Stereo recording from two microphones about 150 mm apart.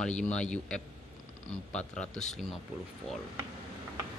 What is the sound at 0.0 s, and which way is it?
A man's voice, 5° left (ahead or behind).